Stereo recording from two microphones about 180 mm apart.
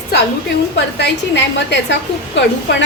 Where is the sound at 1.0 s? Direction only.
70° left (ahead or behind).